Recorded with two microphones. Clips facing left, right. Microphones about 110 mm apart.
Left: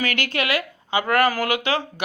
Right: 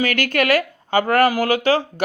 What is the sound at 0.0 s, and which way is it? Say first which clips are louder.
Speech: right 5 dB; 45° right (ahead or behind).